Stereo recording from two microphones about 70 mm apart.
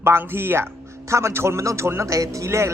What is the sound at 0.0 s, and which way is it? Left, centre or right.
Speech, right.